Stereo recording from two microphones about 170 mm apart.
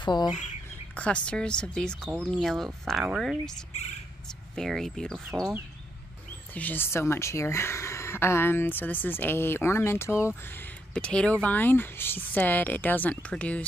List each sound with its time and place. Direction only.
0.0 s speech: 25° left (ahead or behind)
0.9 s speech: 5° left (ahead or behind)
4.6 s speech: centre (ahead or behind)
6.5 s speech: 10° left (ahead or behind)